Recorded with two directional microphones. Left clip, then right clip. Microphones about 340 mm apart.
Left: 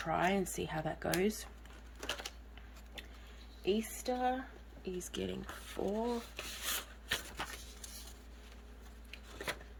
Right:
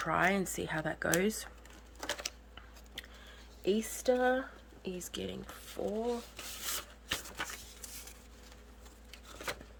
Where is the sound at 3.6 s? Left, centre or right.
Centre.